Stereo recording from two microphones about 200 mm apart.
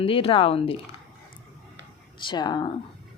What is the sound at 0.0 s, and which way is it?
Speech, 25° left (ahead or behind).